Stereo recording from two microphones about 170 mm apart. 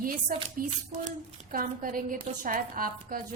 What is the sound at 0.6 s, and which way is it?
A woman's voice, 55° right (ahead or behind).